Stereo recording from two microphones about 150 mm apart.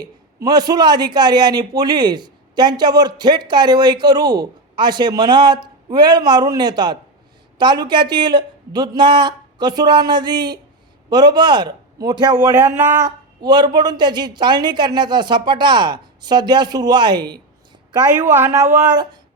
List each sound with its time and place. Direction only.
0.0 s a woman's voice: 25° right (ahead or behind)
12.5 s speech: 10° right (ahead or behind)
13.1 s a woman's voice: 30° right (ahead or behind)
18.2 s speech: 15° right (ahead or behind)